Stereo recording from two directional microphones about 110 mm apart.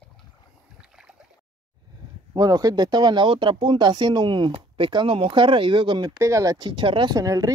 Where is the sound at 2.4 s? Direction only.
35° right (ahead or behind).